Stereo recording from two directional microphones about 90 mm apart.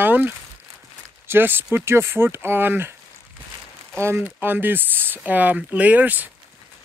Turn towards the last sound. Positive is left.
turn(degrees=-20)  # may be behind; listen again after turning